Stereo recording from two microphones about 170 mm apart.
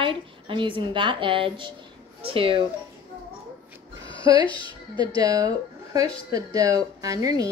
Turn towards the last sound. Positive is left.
turn(degrees=-20)  # may be behind; listen again after turning